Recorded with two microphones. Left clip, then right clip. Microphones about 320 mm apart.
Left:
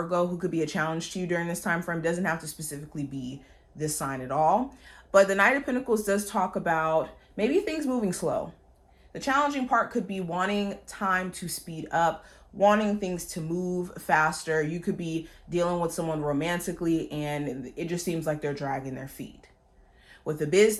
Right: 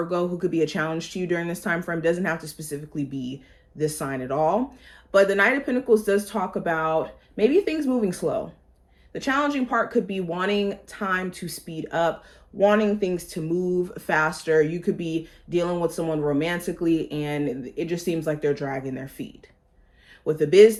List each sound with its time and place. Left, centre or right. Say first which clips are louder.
0.1 s speech: right 2 dB; centre
1.1 s speech: right 3 dB; left
9.1 s speech: right 2 dB; centre
11.7 s speech: right 2 dB; left
20.2 s speech: right 7 dB; left